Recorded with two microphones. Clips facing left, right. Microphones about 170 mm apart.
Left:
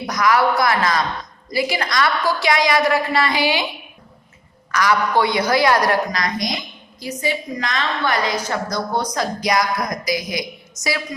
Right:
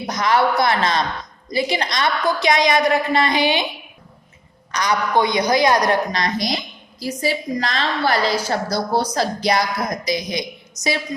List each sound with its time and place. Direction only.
0.1 s a woman's voice: 25° right (ahead or behind)
4.7 s a woman's voice: 20° right (ahead or behind)